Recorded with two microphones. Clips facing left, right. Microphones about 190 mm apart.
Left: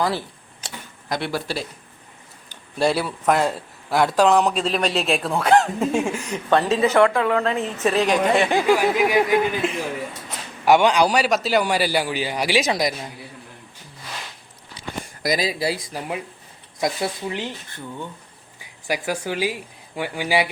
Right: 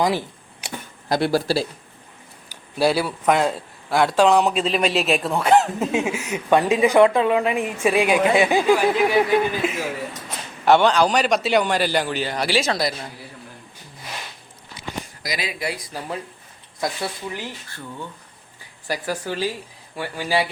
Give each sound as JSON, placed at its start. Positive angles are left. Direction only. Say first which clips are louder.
{"t": 0.0, "sound": "a sound", "louder": "right 2 dB", "side_deg": -15}
{"t": 1.0, "sound": "speech", "louder": "right 6 dB", "side_deg": -35}
{"t": 2.5, "sound": "a man's voice", "louder": "right 1 dB", "side_deg": -5}
{"t": 8.6, "sound": "a man's voice", "louder": "right 1 dB", "side_deg": 5}
{"t": 9.6, "sound": "a man's voice", "louder": "even", "side_deg": -5}
{"t": 10.7, "sound": "a man's voice", "louder": "even", "side_deg": 10}
{"t": 15.4, "sound": "speech", "louder": "left 5 dB", "side_deg": 35}
{"t": 15.9, "sound": "a man's voice", "louder": "left 1 dB", "side_deg": 15}